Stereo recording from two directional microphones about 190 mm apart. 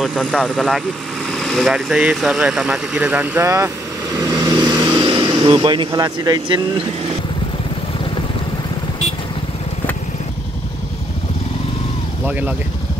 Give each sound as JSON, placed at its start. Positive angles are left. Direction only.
{"t": 0.0, "sound": "speech", "side_deg": 0}
{"t": 4.6, "sound": "vehicle", "side_deg": -25}
{"t": 4.9, "sound": "speech", "side_deg": -25}
{"t": 12.3, "sound": "speech", "side_deg": -10}